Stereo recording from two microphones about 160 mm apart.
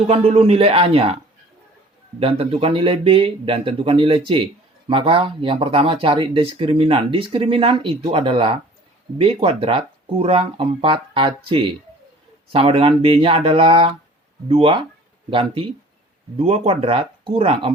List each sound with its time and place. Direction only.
0.1 s speech: 40° right (ahead or behind)